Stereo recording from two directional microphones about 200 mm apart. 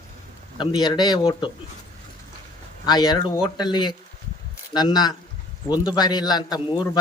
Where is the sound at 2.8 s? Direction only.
20° left (ahead or behind).